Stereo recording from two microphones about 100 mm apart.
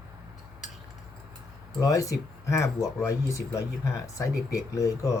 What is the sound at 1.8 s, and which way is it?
Speech, 35° left (ahead or behind).